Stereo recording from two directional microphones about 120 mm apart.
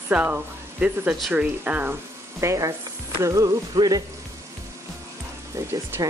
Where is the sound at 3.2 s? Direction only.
30° right (ahead or behind).